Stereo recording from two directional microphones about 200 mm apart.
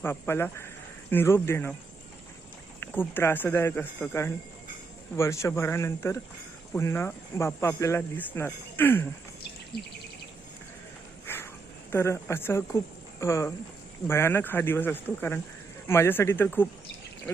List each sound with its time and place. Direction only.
0.0 s speech: 10° left (ahead or behind)
2.8 s speech: 10° left (ahead or behind)
9.7 s bird: 55° left (ahead or behind)
11.3 s insect: 10° left (ahead or behind)
11.9 s speech: 10° left (ahead or behind)